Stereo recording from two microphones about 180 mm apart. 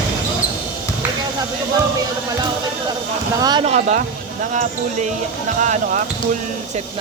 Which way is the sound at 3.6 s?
40° right (ahead or behind).